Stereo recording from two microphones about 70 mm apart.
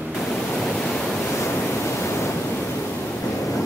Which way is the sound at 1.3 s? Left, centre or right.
Left.